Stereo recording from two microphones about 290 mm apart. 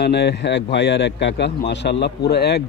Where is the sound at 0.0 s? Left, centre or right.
Left.